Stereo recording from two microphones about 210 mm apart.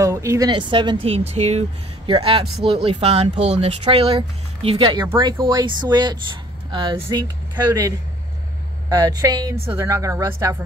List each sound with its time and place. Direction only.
0.0 s speech: 15° right (ahead or behind)
8.8 s a woman's voice: 15° right (ahead or behind)